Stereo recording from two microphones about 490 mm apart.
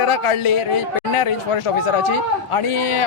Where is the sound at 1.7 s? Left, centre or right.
Left.